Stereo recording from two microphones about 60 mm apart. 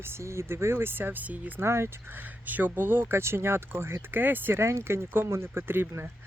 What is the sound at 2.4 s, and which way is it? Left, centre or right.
Speech, right.